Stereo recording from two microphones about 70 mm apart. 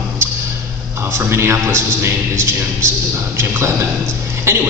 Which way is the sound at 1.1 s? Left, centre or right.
Right.